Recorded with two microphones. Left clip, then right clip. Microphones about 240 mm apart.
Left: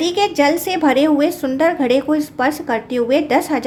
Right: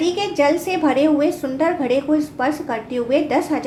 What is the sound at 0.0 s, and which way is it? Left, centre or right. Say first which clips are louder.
A woman's voice: left 3 dB; left.